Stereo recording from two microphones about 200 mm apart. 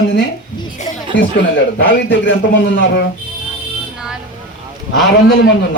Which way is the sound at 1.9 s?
60° left (ahead or behind).